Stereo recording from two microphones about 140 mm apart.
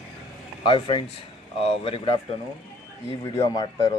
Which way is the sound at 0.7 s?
35° left (ahead or behind).